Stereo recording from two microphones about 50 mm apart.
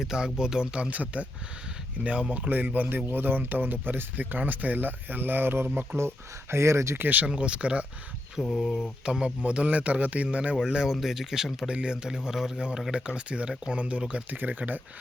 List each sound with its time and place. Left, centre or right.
0.0 s a man's voice: centre; by 1.3 s right
2.3 s speech: right
6.5 s speech: right
6.9 s speech: right
7.3 s speech: right
8.4 s a sound: centre
9.0 s a man's voice: centre
10.6 s a man's voice: centre
11.7 s a man's voice: centre
12.9 s speech: centre
14.3 s speech: right